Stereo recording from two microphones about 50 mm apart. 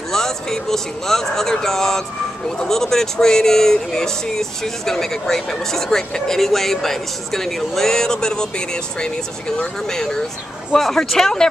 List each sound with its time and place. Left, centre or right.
0.1 s speech: centre